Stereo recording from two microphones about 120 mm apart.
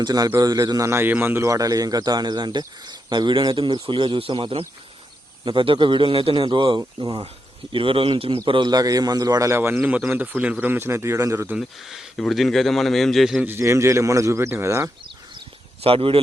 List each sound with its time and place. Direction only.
0.0 s a man's voice: 30° right (ahead or behind)
7.7 s a man's voice: 45° right (ahead or behind); by 9.7 s 20° right (ahead or behind)
9.7 s a man's voice: 5° right (ahead or behind); by 11.5 s 25° right (ahead or behind)
11.5 s speech: 5° right (ahead or behind)
13.4 s a man's voice: 20° right (ahead or behind)
15.8 s a man's voice: 50° right (ahead or behind)